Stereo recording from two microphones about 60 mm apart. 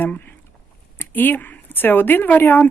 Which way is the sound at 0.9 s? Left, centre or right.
Left.